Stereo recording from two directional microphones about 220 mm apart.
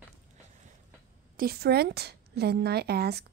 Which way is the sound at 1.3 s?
45° right (ahead or behind).